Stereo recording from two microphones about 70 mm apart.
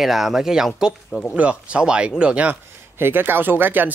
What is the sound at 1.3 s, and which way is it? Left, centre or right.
Speech, centre.